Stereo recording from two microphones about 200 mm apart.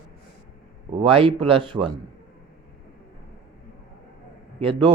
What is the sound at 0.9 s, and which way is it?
Speech, 25° right (ahead or behind).